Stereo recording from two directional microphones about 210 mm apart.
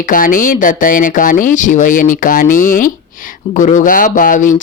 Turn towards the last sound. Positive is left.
turn(degrees=40)  # may be behind; listen again after turning